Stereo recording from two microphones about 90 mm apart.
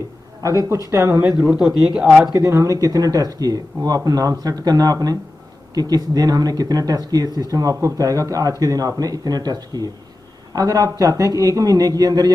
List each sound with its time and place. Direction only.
0.4 s a man's voice: 40° right (ahead or behind)
1.5 s a man's voice: 5° right (ahead or behind)
2.3 s a man's voice: 40° right (ahead or behind)